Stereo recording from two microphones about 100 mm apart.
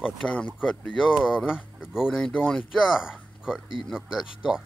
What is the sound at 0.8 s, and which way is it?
Speech, centre (ahead or behind).